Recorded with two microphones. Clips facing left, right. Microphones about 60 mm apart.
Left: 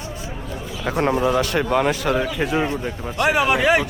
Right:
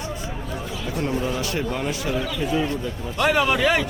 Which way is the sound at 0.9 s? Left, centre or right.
Left.